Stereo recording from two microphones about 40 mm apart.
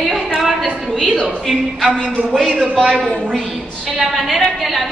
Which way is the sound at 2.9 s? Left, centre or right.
Left.